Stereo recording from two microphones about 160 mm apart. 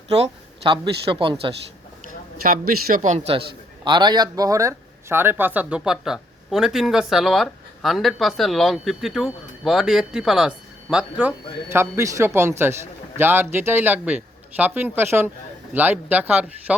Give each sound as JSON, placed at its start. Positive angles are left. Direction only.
{"t": 0.2, "sound": "speech", "side_deg": -35}
{"t": 2.9, "sound": "a man's voice", "side_deg": -50}
{"t": 3.8, "sound": "a man's voice", "side_deg": -30}